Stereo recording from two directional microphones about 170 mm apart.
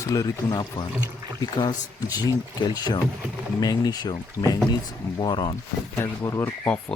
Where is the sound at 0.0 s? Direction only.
20° left (ahead or behind).